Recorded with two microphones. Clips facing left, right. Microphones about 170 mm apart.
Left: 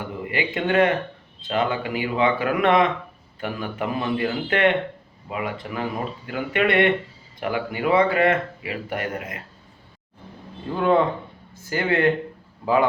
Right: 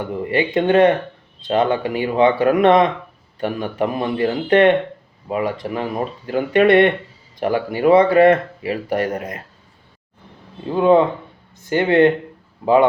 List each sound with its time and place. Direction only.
0.3 s speech: 30° right (ahead or behind)
10.7 s speech: 20° right (ahead or behind)